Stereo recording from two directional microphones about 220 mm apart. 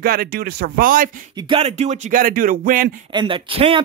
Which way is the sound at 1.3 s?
20° right (ahead or behind).